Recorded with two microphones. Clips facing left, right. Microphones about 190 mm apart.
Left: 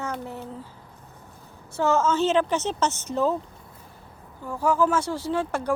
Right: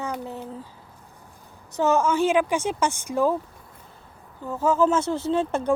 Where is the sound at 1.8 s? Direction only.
15° right (ahead or behind).